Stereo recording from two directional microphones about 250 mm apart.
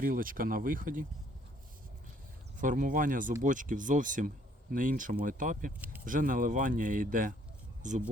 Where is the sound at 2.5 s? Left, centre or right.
Right.